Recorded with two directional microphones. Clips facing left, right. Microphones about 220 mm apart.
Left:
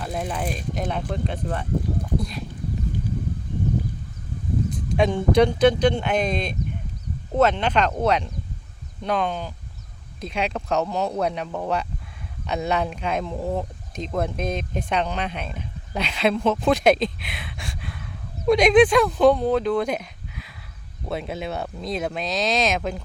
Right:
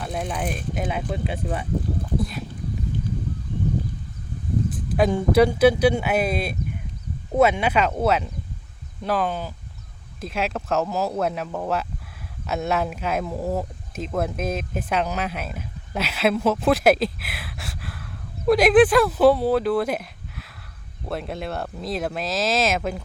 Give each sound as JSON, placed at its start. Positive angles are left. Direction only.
{"t": 0.0, "sound": "speech", "side_deg": 0}
{"t": 4.7, "sound": "speech", "side_deg": -5}